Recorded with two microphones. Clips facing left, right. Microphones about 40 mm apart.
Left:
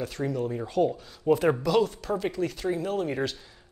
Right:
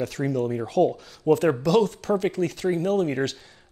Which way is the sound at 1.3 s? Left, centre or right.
Centre.